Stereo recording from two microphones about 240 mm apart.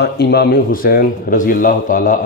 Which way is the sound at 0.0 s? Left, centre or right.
Left.